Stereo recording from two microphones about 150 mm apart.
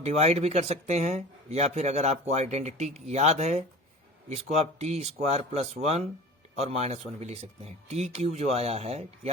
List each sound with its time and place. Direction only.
0.0 s speech: 45° right (ahead or behind)